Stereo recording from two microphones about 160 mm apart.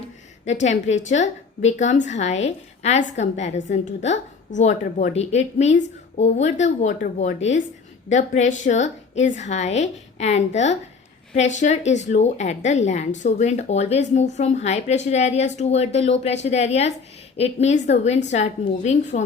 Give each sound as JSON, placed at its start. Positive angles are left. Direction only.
{"t": 0.4, "sound": "a woman's voice", "side_deg": 45}